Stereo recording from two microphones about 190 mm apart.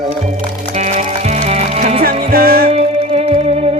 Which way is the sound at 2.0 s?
50° right (ahead or behind).